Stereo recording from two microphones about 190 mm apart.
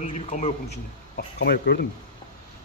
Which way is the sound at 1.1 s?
60° left (ahead or behind).